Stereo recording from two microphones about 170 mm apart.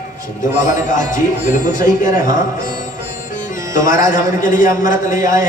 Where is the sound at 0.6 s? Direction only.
50° left (ahead or behind).